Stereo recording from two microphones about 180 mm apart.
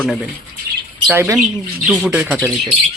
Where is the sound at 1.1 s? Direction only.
15° right (ahead or behind).